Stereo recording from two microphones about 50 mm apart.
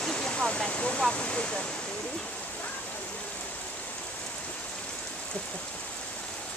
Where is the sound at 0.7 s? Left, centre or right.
Left.